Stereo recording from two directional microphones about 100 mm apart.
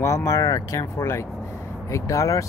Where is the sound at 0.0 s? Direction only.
30° left (ahead or behind).